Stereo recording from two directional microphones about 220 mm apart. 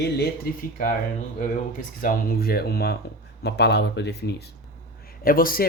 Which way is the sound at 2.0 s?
40° left (ahead or behind).